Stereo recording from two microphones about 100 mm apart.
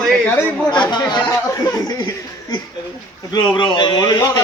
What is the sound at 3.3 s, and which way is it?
Speech, 50° left (ahead or behind).